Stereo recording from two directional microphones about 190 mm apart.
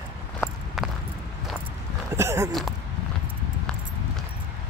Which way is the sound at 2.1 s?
15° right (ahead or behind).